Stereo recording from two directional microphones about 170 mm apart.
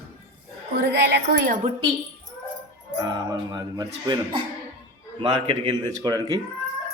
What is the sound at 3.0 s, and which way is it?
A man's voice, 20° right (ahead or behind).